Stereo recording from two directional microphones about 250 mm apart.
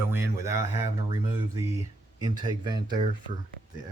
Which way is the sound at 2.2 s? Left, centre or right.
Centre.